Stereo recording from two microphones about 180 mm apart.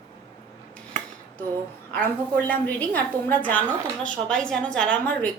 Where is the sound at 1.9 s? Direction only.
10° left (ahead or behind).